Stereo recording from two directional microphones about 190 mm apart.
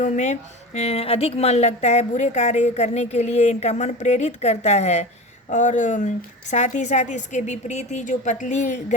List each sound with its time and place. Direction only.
0.0 s a woman's voice: 35° left (ahead or behind)